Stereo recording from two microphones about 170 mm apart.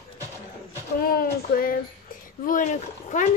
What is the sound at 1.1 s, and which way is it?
Speech, 60° left (ahead or behind).